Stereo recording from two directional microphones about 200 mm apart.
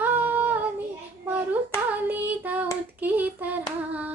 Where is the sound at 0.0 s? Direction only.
10° right (ahead or behind).